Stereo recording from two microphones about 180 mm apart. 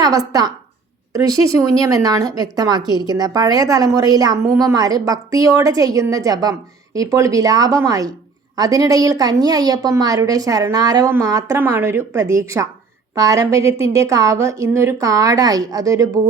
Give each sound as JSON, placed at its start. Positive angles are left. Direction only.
{"t": 0.0, "sound": "a woman's voice", "side_deg": -20}